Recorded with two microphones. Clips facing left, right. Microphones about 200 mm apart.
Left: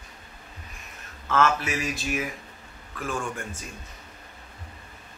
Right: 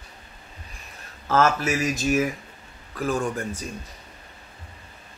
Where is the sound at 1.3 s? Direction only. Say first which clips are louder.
Right 3 dB; 40° right (ahead or behind).